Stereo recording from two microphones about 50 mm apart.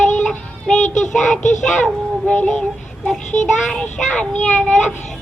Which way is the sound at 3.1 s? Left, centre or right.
Centre.